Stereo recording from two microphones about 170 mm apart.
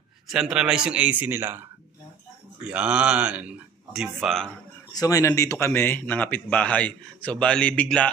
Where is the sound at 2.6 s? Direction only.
5° right (ahead or behind).